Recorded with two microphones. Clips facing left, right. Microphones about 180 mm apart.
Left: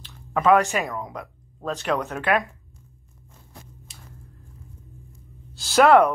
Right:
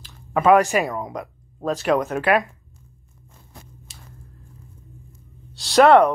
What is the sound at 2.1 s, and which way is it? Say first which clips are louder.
Speech: right 4 dB; 5° right (ahead or behind).